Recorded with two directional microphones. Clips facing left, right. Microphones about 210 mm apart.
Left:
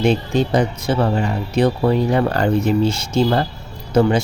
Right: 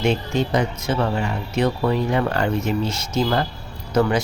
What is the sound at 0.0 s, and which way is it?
Speech, 35° left (ahead or behind).